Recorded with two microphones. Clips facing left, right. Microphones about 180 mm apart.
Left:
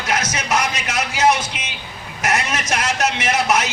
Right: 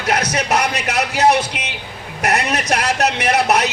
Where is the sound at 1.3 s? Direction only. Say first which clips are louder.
Right 3 dB; 60° right (ahead or behind).